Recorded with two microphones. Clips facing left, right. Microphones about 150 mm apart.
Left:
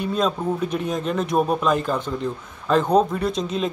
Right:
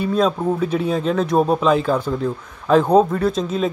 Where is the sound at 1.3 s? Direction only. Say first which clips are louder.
Right 3 dB; 30° right (ahead or behind).